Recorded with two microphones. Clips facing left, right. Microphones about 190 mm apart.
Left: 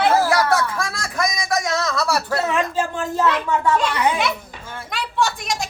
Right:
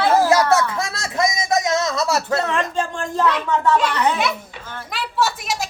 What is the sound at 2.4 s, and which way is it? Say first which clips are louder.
A child's voice: left 1 dB; 5° left (ahead or behind).